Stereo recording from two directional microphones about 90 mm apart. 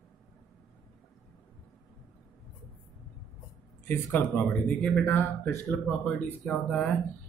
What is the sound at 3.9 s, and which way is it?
Speech, 20° left (ahead or behind).